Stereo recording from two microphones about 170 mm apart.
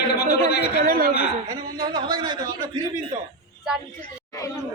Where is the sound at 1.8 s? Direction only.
25° right (ahead or behind).